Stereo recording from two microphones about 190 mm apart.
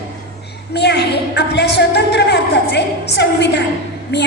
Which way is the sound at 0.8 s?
60° left (ahead or behind).